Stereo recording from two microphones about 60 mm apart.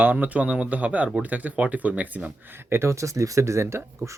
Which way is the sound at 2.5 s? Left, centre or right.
Right.